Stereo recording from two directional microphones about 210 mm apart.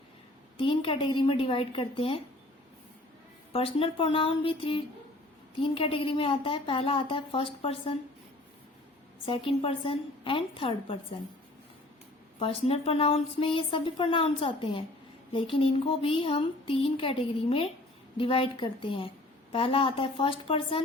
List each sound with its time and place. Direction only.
0.5 s speech: 25° left (ahead or behind)
3.5 s speech: 25° left (ahead or behind)
9.2 s speech: 25° left (ahead or behind)
12.4 s speech: 25° left (ahead or behind)